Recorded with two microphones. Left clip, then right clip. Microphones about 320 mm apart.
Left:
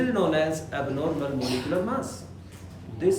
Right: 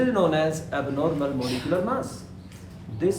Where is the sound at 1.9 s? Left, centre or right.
Centre.